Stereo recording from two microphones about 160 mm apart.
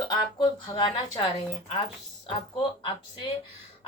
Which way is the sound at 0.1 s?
25° left (ahead or behind).